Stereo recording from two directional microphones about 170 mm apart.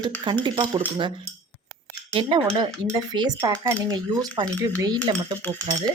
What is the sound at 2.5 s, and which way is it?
Speech, 25° right (ahead or behind).